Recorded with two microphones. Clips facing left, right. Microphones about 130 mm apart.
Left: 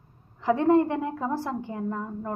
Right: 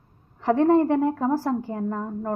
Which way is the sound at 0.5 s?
35° right (ahead or behind).